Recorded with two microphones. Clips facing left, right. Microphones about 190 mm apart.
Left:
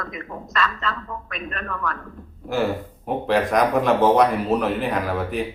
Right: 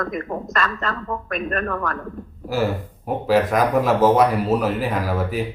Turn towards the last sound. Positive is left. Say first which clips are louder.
# right 1 dB
turn(degrees=0)  # may be behind; listen again after turning